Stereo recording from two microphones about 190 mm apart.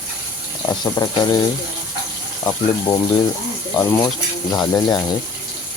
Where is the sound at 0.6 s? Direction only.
20° left (ahead or behind).